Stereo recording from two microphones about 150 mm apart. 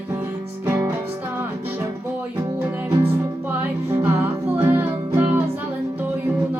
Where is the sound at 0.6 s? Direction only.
15° right (ahead or behind).